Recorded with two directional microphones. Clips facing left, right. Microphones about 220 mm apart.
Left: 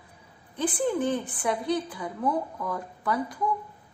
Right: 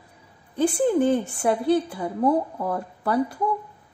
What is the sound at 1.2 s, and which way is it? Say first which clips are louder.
Speech: right 6 dB; 45° right (ahead or behind).